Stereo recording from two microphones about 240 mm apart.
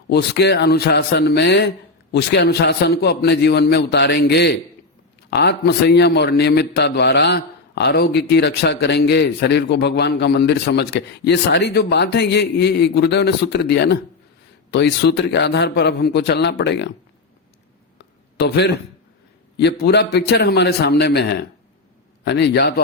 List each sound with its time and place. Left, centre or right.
0.1 s a man's voice: left
17.9 s a sound: left
19.5 s a man's voice: left